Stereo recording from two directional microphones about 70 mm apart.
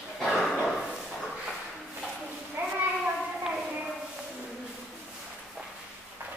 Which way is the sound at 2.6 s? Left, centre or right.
Right.